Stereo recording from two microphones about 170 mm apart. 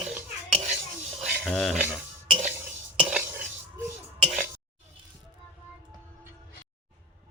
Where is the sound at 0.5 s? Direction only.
40° right (ahead or behind).